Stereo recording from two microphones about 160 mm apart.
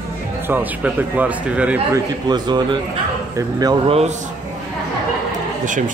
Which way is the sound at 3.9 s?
45° right (ahead or behind).